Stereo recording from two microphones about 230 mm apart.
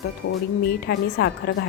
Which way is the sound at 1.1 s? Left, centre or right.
Left.